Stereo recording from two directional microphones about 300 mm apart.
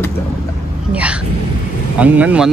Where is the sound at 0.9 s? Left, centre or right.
Centre.